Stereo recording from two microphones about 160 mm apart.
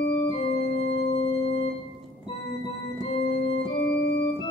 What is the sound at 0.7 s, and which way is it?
Music, 35° left (ahead or behind).